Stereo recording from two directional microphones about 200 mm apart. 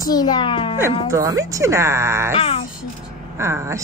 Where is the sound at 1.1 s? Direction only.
15° right (ahead or behind).